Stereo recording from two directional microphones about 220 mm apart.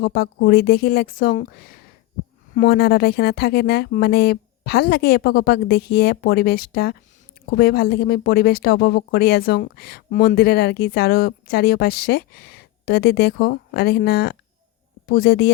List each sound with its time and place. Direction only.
0.0 s speech: 45° left (ahead or behind)